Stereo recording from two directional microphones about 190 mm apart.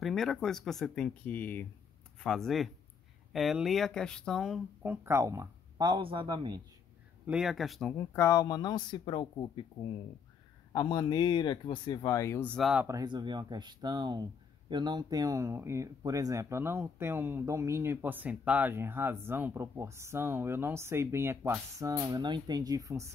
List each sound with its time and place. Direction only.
0.0 s speech: centre (ahead or behind)
4.8 s speech: 15° right (ahead or behind)
7.2 s speech: 5° right (ahead or behind)
8.0 s speech: 15° left (ahead or behind)
10.7 s speech: 25° left (ahead or behind)
12.5 s speech: centre (ahead or behind)
12.8 s speech: 20° right (ahead or behind)